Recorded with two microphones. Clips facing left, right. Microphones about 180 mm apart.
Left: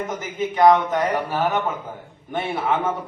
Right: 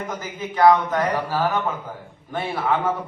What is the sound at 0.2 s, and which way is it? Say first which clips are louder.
Mantra: left 1 dB; 20° left (ahead or behind).